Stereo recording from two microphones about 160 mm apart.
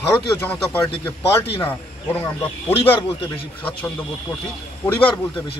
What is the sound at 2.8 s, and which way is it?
Speech, 35° left (ahead or behind).